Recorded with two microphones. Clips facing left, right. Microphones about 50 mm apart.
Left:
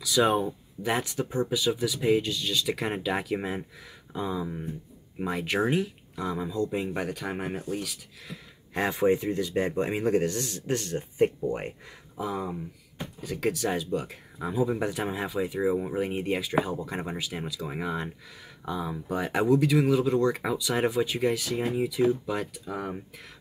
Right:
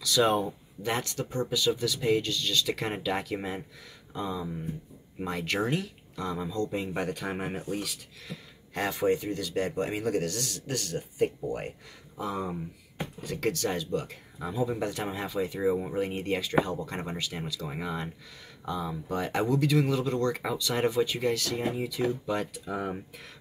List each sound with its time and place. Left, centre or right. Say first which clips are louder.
0.0 s speech: left 1 dB; centre
8.7 s speech: left 3 dB; centre
12.2 s speech: left 1 dB; centre